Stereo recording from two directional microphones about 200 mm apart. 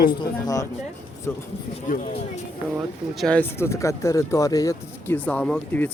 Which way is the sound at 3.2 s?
5° left (ahead or behind).